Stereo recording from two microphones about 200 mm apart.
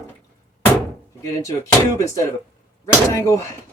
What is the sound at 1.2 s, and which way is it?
Speech, 15° left (ahead or behind).